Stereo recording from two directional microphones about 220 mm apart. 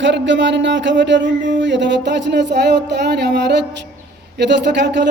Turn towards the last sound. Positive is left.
turn(degrees=-50)  # may be behind; listen again after turning